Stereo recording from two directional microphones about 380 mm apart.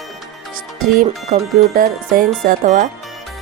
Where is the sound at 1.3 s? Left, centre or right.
Right.